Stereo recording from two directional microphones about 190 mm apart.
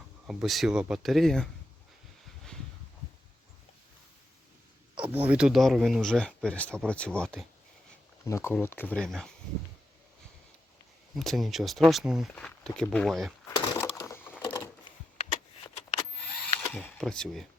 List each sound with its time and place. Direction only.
0.3 s speech: centre (ahead or behind)
4.9 s speech: 10° right (ahead or behind)
11.1 s speech: centre (ahead or behind)
13.5 s a sound: 20° left (ahead or behind)
15.2 s a sound: 30° left (ahead or behind)
16.7 s speech: 5° left (ahead or behind)